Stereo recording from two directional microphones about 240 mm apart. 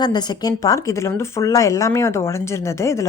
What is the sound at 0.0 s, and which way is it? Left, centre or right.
Speech, centre.